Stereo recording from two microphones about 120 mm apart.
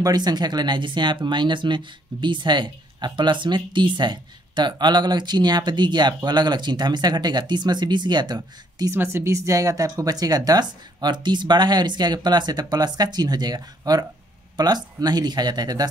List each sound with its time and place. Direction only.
0.0 s speech: 35° right (ahead or behind)
8.9 s speech: 20° right (ahead or behind)